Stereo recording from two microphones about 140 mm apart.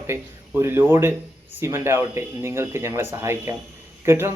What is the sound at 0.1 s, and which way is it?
Speech, 15° right (ahead or behind).